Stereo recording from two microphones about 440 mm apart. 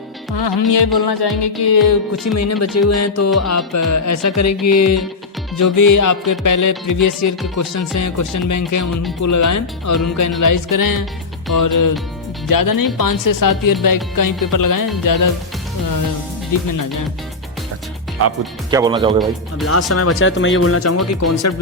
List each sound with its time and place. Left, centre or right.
0.3 s music: left
2.2 s music: left
10.4 s speech: left
18.7 s speech: centre
20.0 s music: left